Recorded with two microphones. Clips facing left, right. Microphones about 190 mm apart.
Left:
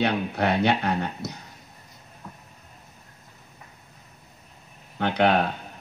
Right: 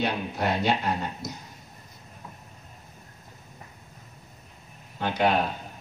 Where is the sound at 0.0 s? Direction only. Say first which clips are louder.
Left 3 dB; 65° left (ahead or behind).